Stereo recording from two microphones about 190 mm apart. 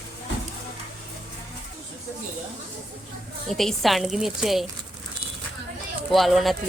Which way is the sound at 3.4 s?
Centre (ahead or behind).